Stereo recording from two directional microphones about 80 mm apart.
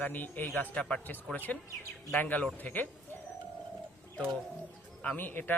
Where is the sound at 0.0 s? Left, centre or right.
Left.